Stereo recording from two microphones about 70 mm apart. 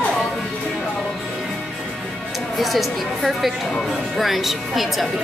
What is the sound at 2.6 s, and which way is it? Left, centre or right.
A woman's voice, centre.